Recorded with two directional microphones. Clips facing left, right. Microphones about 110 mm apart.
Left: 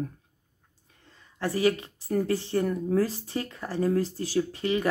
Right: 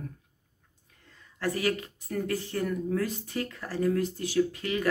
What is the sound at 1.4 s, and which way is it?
A woman's voice, 25° left (ahead or behind).